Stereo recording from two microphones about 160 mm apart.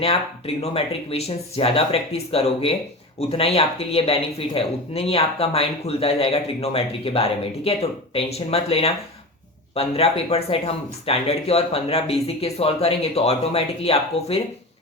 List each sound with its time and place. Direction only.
0.0 s speech: 40° left (ahead or behind)